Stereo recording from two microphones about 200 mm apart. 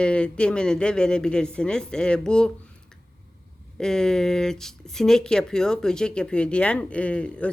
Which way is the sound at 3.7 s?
5° left (ahead or behind).